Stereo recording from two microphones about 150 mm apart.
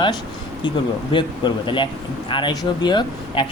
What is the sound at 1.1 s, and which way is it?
Speech, 30° left (ahead or behind).